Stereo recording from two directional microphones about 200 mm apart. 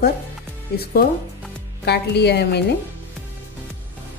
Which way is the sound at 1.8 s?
55° left (ahead or behind).